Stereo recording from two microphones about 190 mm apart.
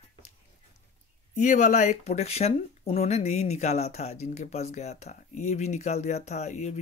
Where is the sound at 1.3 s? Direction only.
40° left (ahead or behind).